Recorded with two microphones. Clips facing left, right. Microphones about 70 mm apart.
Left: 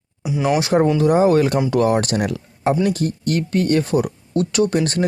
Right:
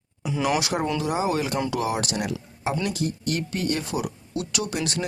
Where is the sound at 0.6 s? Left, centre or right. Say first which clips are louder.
Left 10 dB; left.